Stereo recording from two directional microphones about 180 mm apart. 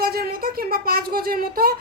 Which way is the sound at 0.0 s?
55° right (ahead or behind).